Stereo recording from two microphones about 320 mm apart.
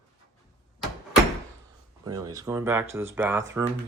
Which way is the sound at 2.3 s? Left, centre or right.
Centre.